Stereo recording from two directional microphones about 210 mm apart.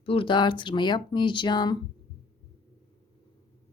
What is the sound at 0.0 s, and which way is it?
A woman's voice, 25° left (ahead or behind).